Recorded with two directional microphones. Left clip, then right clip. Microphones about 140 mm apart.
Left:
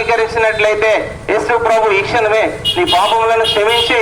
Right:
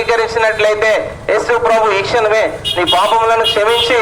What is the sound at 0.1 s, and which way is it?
A man's voice, 45° right (ahead or behind).